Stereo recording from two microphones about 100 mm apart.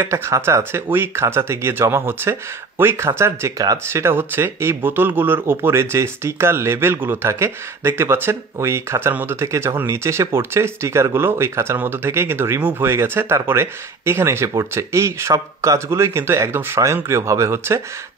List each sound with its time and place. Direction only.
0.0 s speech: 25° right (ahead or behind)